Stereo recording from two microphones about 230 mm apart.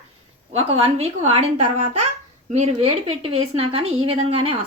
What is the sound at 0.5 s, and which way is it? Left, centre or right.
Speech, right.